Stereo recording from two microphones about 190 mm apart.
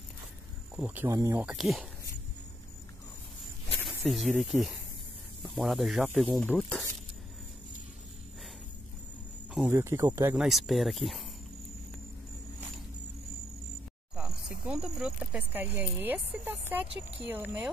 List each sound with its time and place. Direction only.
0.7 s speech: 10° right (ahead or behind)
1.4 s speech: centre (ahead or behind)
3.8 s speech: centre (ahead or behind)
9.5 s speech: 10° right (ahead or behind)
10.3 s speech: centre (ahead or behind)
14.1 s speech: 5° right (ahead or behind)